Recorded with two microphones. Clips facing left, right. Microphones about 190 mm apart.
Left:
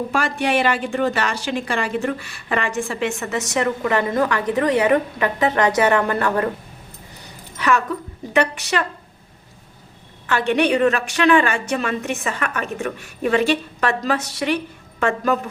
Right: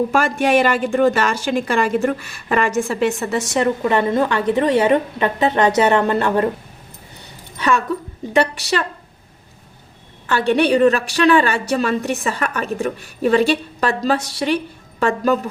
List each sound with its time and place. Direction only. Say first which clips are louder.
0.1 s a woman's voice: right 4 dB; 45° right (ahead or behind); by 6.5 s 25° right (ahead or behind)
8.3 s a woman's voice: right 2 dB; 35° right (ahead or behind)
10.2 s a woman's voice: right 2 dB; 35° right (ahead or behind)